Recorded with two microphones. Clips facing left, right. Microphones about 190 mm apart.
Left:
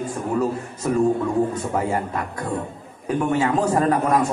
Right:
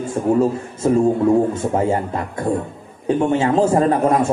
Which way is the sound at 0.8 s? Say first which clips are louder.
Right 6 dB; 30° right (ahead or behind).